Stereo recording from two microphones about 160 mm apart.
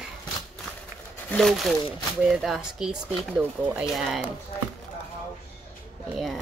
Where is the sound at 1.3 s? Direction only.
Centre (ahead or behind).